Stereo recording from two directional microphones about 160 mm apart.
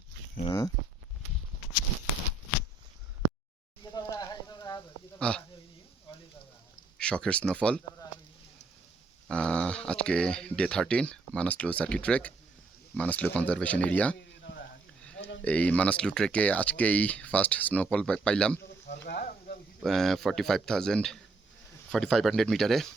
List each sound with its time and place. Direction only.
0.4 s speech: 20° left (ahead or behind)
3.9 s a sound: 20° left (ahead or behind)
5.2 s hiccup: 5° left (ahead or behind)
7.0 s speech: 5° left (ahead or behind)
9.3 s speech: 5° left (ahead or behind)
14.2 s a sound: 90° left
15.4 s speech: 10° left (ahead or behind)
18.9 s sizzle: 90° left
19.8 s speech: centre (ahead or behind)